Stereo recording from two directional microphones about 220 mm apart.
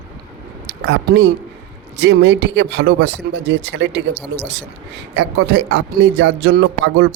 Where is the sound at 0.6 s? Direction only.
50° right (ahead or behind).